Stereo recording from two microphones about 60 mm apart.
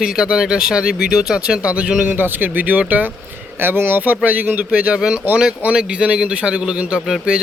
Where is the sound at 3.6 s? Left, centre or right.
Right.